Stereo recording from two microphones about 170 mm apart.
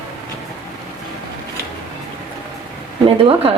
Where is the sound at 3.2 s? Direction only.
35° right (ahead or behind).